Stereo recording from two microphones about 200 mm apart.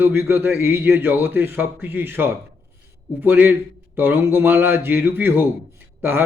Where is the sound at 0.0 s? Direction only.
10° right (ahead or behind).